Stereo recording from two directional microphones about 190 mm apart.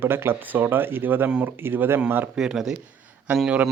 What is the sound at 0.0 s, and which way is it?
Speech, 10° right (ahead or behind).